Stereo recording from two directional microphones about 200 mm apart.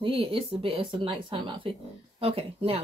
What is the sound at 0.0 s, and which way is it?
Speech, 25° right (ahead or behind).